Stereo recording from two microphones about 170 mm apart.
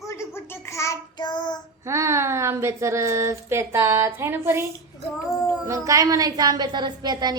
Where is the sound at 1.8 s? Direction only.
15° right (ahead or behind).